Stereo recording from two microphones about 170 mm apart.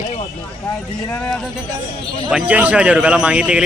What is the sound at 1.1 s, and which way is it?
Speech, 10° left (ahead or behind).